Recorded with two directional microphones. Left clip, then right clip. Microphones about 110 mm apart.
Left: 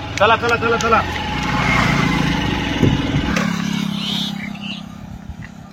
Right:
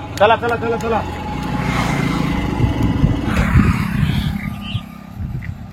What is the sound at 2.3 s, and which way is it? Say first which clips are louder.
Vehicle: left 2 dB; 5° left (ahead or behind).